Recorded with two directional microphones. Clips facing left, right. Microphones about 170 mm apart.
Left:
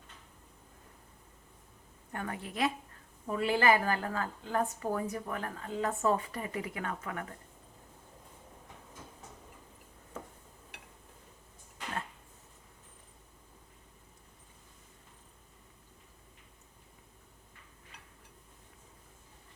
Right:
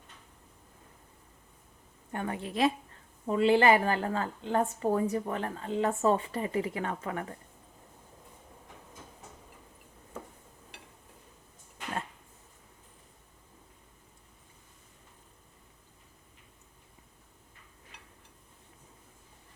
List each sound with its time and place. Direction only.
2.1 s a woman's voice: 25° right (ahead or behind)